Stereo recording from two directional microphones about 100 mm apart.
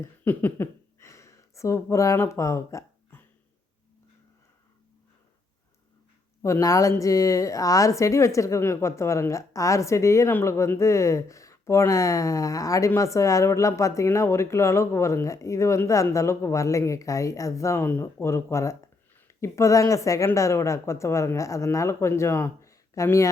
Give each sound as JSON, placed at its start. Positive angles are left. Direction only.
{"t": 0.0, "sound": "speech", "side_deg": 20}
{"t": 6.4, "sound": "a woman's voice", "side_deg": 30}